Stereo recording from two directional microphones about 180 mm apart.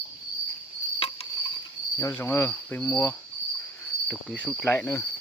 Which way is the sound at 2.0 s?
15° left (ahead or behind).